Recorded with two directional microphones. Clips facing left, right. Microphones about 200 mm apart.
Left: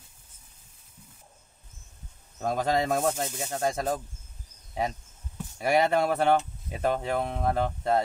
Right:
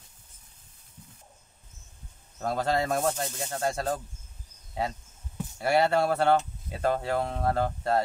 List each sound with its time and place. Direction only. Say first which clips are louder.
2.4 s speech: left 1 dB; 15° left (ahead or behind)
5.6 s speech: even; 15° left (ahead or behind)